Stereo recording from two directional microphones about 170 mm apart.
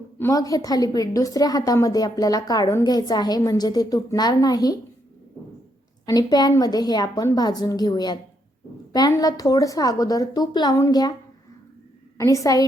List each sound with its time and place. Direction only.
0.2 s a woman's voice: 20° left (ahead or behind)
6.1 s a woman's voice: 25° left (ahead or behind)
12.1 s a woman's voice: 20° left (ahead or behind)